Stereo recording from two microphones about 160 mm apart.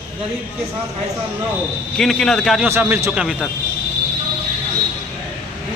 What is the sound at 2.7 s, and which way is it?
Speech, 15° right (ahead or behind).